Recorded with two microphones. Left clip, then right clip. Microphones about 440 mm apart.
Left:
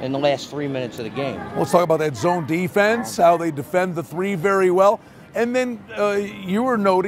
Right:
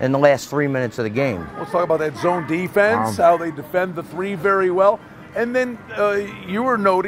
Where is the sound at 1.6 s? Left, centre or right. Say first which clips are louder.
Left 2 dB; left.